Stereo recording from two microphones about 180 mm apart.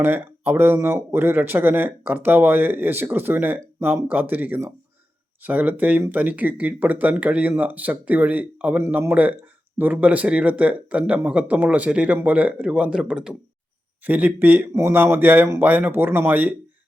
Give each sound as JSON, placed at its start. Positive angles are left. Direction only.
{"t": 0.0, "sound": "speech", "side_deg": -10}